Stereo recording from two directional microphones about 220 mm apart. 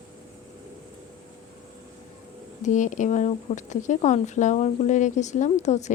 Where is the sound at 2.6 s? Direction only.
35° left (ahead or behind).